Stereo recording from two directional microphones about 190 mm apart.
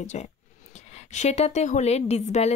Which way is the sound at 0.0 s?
35° left (ahead or behind).